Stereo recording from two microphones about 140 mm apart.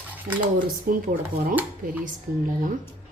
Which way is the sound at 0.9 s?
90° right.